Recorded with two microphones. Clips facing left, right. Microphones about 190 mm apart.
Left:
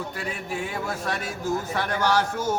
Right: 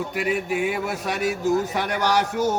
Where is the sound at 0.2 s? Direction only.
15° right (ahead or behind).